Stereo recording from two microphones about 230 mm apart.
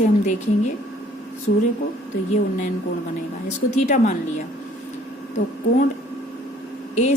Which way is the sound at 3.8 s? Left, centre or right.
Left.